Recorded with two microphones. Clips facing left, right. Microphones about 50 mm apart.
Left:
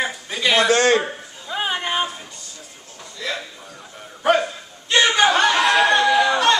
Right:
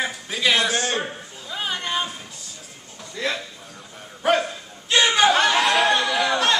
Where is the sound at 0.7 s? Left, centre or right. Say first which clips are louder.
Left 8 dB; left.